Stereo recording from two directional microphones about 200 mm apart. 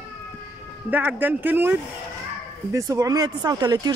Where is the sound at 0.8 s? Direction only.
10° right (ahead or behind).